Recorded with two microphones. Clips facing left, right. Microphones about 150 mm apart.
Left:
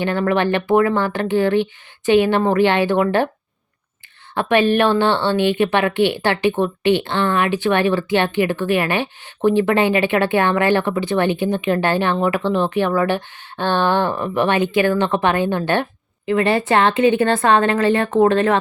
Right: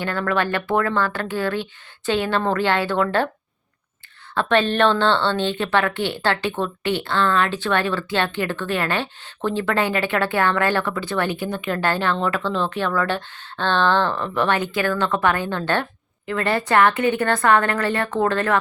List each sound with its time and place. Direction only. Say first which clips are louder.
0.0 s speech: left 5 dB; 20° left (ahead or behind)
4.4 s speech: left 3 dB; 10° left (ahead or behind)